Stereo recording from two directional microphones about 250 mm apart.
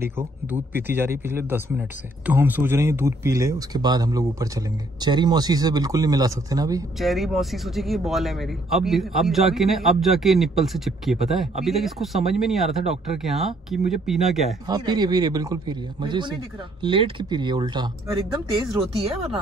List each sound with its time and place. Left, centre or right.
0.0 s speech: centre
7.0 s speech: centre
14.7 s speech: centre
18.7 s speech: centre